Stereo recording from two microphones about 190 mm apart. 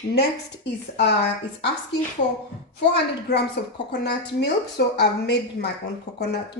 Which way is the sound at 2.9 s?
60° left (ahead or behind).